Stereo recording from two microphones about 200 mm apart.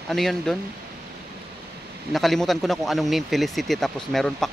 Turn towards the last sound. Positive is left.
turn(degrees=5)  # may be behind; listen again after turning